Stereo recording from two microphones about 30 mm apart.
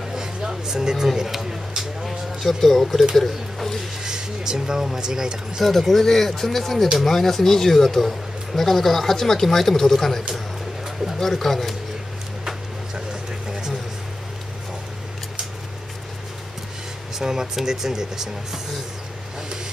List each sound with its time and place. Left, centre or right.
0.1 s a sound: centre
1.8 s speech: centre
2.6 s a man's voice: centre
4.0 s speech: right
5.6 s a man's voice: centre
12.4 s a sound: centre
17.2 s speech: centre